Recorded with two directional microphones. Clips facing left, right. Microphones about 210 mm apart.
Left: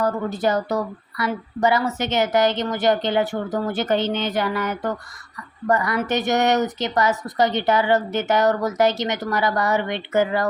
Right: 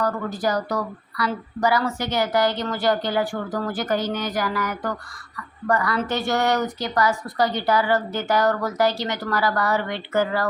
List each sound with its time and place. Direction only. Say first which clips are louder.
0.0 s speech: left 2 dB; 25° left (ahead or behind)